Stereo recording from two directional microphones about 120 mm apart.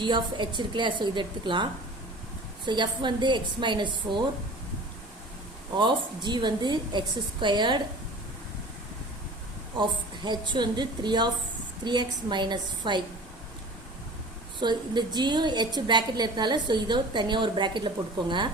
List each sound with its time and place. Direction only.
0.0 s a woman's voice: 40° right (ahead or behind)
5.7 s a woman's voice: 40° right (ahead or behind)
9.7 s a woman's voice: 40° right (ahead or behind)
14.6 s a woman's voice: 40° right (ahead or behind)